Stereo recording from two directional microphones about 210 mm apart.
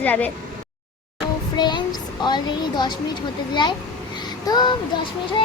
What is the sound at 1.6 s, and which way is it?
A woman's voice, 20° left (ahead or behind).